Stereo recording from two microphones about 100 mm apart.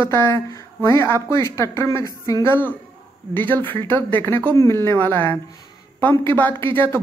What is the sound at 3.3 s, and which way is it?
A woman's voice, 20° left (ahead or behind).